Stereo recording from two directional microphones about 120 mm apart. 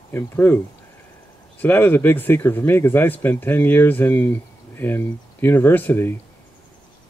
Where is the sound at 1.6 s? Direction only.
15° left (ahead or behind).